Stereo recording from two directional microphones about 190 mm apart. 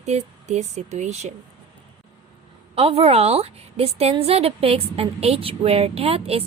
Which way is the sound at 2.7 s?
30° right (ahead or behind).